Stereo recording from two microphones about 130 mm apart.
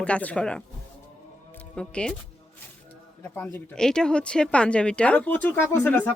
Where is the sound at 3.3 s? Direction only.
10° left (ahead or behind).